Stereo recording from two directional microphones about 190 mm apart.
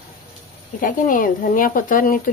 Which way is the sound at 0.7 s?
45° left (ahead or behind).